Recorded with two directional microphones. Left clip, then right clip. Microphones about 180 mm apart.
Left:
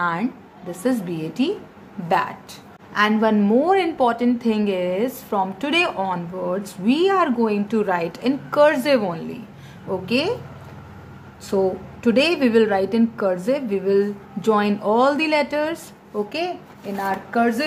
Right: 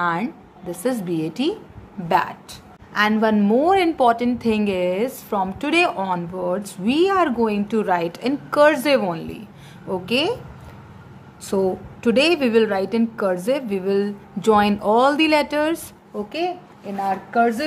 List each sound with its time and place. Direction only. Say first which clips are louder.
0.0 s a woman's voice: right 1 dB; 20° right (ahead or behind)
11.4 s a woman's voice: left 1 dB; 25° right (ahead or behind)
16.3 s speech: right 1 dB; 10° right (ahead or behind)